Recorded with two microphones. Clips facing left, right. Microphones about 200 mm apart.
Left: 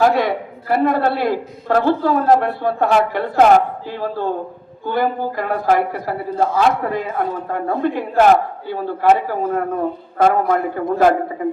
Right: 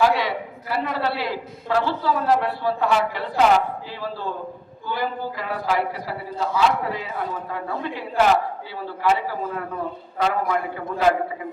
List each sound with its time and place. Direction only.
0.0 s a woman's voice: 50° left (ahead or behind)